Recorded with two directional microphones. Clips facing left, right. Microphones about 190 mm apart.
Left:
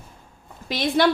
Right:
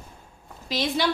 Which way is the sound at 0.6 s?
55° left (ahead or behind).